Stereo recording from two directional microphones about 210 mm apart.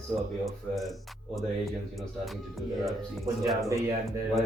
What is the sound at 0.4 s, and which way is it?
Speech, centre (ahead or behind).